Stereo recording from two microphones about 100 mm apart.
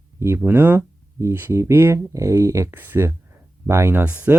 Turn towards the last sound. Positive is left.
turn(degrees=-20)  # may be behind; listen again after turning